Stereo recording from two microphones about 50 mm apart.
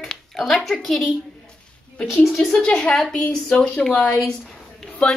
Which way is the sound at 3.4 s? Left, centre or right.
Left.